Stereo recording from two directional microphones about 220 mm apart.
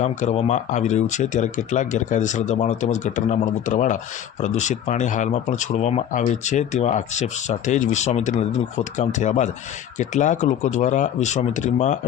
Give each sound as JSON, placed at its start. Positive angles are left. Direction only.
{"t": 0.0, "sound": "speech", "side_deg": 30}